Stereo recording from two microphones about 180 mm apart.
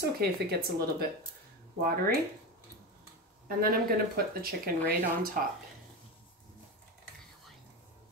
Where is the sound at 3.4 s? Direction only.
55° right (ahead or behind).